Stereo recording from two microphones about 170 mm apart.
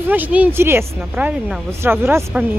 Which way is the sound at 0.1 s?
10° right (ahead or behind).